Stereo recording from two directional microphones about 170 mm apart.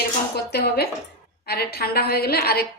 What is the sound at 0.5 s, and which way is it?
A woman's voice, 70° left (ahead or behind).